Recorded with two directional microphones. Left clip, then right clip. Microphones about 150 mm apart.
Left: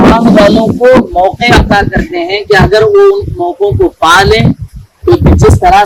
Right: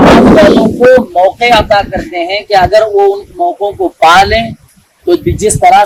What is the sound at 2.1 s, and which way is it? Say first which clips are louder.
Speech: left 1 dB; 90° right.